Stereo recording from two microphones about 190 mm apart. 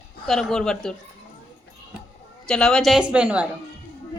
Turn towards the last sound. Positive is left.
turn(degrees=-5)  # may be behind; listen again after turning